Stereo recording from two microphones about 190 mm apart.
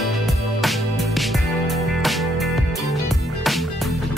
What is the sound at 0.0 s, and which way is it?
Music, centre (ahead or behind).